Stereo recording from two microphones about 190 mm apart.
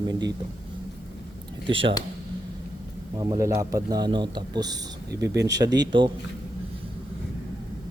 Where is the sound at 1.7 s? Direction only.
25° right (ahead or behind).